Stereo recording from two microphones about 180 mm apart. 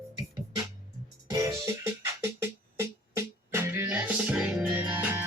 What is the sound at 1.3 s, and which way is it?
Music, 15° right (ahead or behind).